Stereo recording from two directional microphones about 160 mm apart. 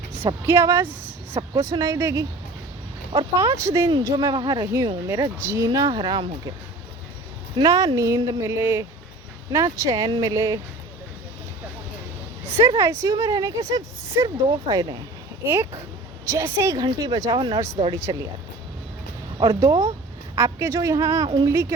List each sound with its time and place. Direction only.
0.4 s a woman's voice: 20° right (ahead or behind)
3.3 s speech: 15° right (ahead or behind)
7.5 s speech: 25° right (ahead or behind)
12.5 s speech: 15° right (ahead or behind)
16.2 s speech: 20° right (ahead or behind)
19.4 s speech: 25° right (ahead or behind)